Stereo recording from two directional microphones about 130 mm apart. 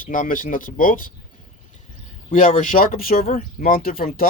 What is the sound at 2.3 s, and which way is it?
Speech, 90° left.